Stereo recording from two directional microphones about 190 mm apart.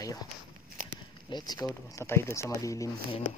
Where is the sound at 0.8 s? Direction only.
45° right (ahead or behind).